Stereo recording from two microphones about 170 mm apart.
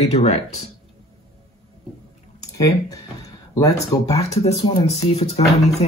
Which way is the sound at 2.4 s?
20° left (ahead or behind).